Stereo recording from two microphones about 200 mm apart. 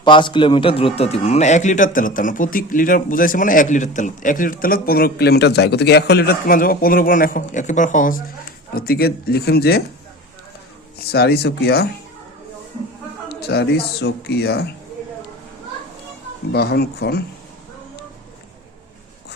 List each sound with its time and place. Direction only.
0.0 s a man's voice: 25° left (ahead or behind); by 9.8 s 50° left (ahead or behind)
10.9 s a man's voice: 55° left (ahead or behind)
13.2 s speech: 55° left (ahead or behind)
16.5 s a man's voice: 55° left (ahead or behind)